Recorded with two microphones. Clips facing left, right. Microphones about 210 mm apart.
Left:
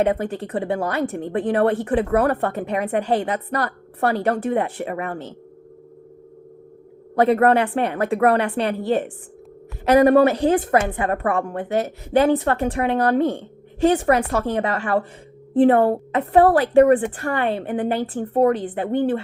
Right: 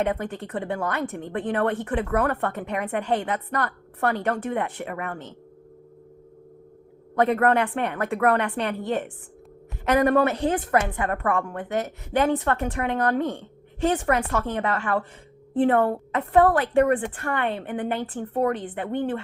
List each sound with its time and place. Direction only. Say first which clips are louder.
0.0 s speech: left 5 dB; 35° left (ahead or behind)
7.2 s speech: left 4 dB; 35° left (ahead or behind)